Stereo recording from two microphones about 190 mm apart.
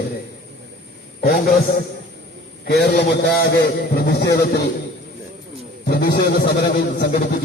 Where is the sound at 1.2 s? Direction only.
50° left (ahead or behind).